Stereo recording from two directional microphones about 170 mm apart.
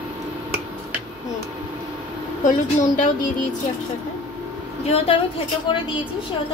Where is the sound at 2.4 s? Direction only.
50° left (ahead or behind).